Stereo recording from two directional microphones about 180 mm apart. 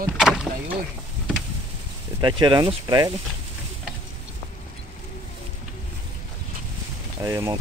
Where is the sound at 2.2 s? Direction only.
25° right (ahead or behind).